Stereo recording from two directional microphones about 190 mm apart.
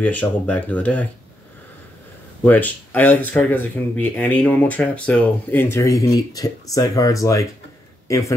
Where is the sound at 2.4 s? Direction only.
10° left (ahead or behind).